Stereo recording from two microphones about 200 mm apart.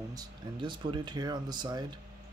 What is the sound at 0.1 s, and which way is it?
Speech, 20° right (ahead or behind).